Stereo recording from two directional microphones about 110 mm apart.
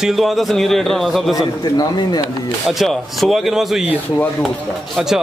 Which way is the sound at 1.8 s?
40° left (ahead or behind).